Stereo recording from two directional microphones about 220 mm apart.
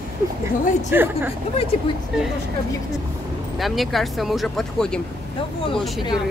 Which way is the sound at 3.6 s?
Centre (ahead or behind).